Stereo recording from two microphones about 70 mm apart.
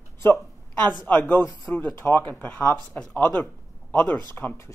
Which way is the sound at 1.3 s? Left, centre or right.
Left.